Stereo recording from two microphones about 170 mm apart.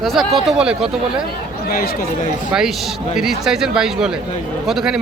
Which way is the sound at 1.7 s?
60° left (ahead or behind).